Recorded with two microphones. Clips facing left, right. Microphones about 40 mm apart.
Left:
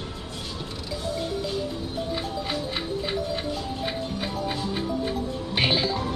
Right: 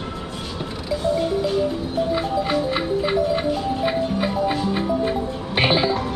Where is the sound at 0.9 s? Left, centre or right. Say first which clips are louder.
Right 9 dB; centre.